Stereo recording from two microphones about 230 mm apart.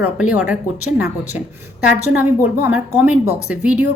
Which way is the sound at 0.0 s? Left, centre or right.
Centre.